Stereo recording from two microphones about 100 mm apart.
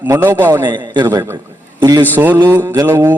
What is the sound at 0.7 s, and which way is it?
Speech, 45° right (ahead or behind).